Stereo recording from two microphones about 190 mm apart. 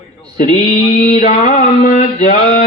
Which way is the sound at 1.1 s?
35° left (ahead or behind).